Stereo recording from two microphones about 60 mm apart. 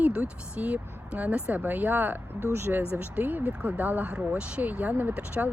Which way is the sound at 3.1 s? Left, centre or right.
Right.